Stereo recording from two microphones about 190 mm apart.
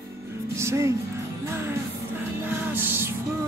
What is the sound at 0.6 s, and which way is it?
Music, 15° right (ahead or behind).